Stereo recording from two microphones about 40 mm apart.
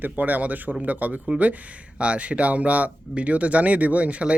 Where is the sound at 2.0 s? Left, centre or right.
Right.